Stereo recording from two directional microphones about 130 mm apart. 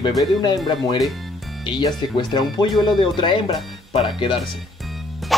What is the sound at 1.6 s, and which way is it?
Speech, 35° left (ahead or behind).